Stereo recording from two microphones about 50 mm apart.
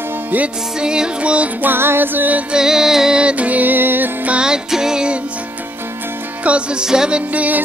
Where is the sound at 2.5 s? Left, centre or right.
Centre.